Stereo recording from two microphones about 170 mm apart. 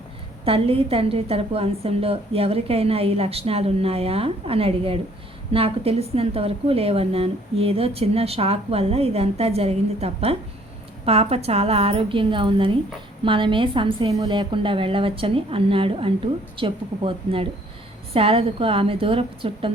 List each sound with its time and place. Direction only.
0.4 s a woman's voice: 35° right (ahead or behind)